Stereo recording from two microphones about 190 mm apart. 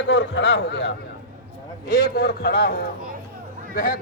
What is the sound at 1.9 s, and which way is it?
Speech, 60° left (ahead or behind).